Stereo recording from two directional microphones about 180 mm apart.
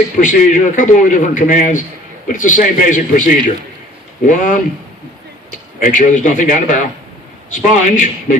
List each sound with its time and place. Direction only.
0.2 s a man's voice: 45° left (ahead or behind)